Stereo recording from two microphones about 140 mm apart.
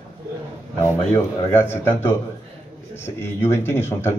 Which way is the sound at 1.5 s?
15° left (ahead or behind).